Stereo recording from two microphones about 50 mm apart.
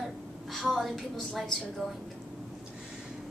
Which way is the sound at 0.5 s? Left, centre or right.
Centre.